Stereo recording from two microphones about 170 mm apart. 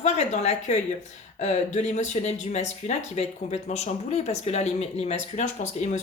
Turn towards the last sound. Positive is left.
turn(degrees=45)  # may be behind; listen again after turning